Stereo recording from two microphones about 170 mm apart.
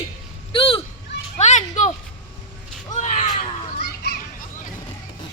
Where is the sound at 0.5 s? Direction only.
30° left (ahead or behind).